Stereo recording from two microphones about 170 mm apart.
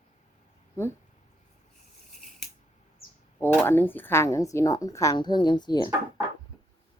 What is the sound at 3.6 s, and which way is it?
A woman's voice, 10° left (ahead or behind).